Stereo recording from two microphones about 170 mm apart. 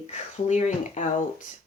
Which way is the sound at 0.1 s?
45° left (ahead or behind).